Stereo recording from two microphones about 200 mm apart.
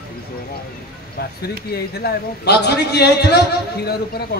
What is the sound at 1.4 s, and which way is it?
A man's voice, 50° left (ahead or behind).